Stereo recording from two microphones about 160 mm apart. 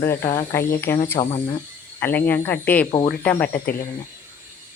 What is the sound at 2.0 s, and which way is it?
Speech, 10° left (ahead or behind).